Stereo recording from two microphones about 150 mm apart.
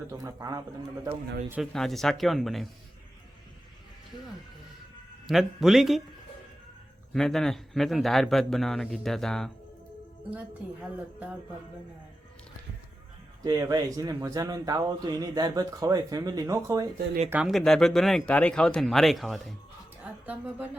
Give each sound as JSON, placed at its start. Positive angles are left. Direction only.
{"t": 0.1, "sound": "speech", "side_deg": -20}
{"t": 1.7, "sound": "a man's voice", "side_deg": 0}
{"t": 5.2, "sound": "a man's voice", "side_deg": 0}
{"t": 7.1, "sound": "a man's voice", "side_deg": 0}
{"t": 13.4, "sound": "speech", "side_deg": -25}
{"t": 17.5, "sound": "a man's voice", "side_deg": 5}